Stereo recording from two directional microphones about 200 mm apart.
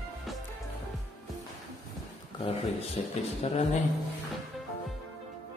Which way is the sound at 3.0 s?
30° left (ahead or behind).